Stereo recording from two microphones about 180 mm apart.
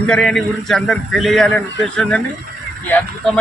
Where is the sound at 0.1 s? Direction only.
5° left (ahead or behind).